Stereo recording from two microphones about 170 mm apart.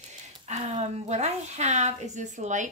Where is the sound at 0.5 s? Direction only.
40° right (ahead or behind).